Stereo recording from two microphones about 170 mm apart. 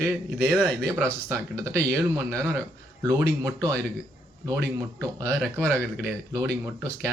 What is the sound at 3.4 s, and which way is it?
Speech, 20° right (ahead or behind).